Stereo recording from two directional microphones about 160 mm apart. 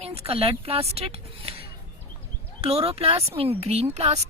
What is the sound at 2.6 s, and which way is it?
Speech, 40° right (ahead or behind).